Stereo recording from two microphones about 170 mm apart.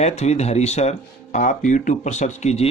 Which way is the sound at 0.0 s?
40° left (ahead or behind).